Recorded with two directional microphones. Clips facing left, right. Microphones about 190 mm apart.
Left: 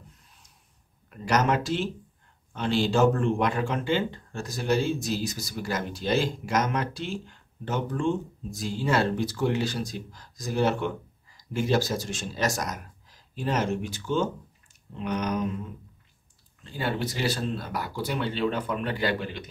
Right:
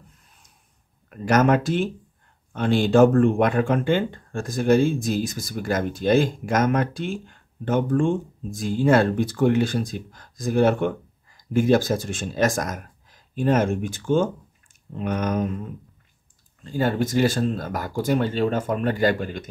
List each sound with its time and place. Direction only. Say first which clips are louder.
1.2 s speech: right 6 dB; 50° right (ahead or behind)
16.6 s speech: right 7 dB; 45° right (ahead or behind)